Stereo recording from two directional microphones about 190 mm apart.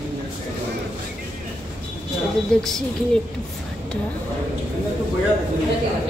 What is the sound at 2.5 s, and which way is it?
Speech, 5° left (ahead or behind).